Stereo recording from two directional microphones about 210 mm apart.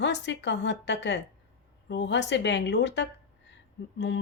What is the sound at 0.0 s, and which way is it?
Speech, 55° left (ahead or behind).